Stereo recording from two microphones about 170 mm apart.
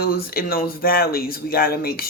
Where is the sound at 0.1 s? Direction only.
60° left (ahead or behind).